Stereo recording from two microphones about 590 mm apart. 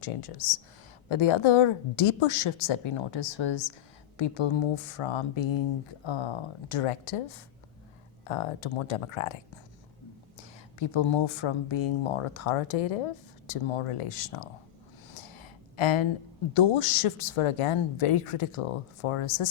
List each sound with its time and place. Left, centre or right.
0.0 s speech: left
1.0 s a woman's voice: left
10.8 s a woman's voice: left
13.5 s speech: left
15.4 s a sound: left
16.6 s speech: left